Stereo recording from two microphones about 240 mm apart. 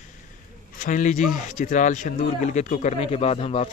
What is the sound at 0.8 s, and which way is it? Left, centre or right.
A man's voice, left.